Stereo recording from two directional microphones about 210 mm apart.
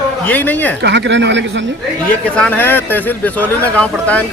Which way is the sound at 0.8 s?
55° right (ahead or behind).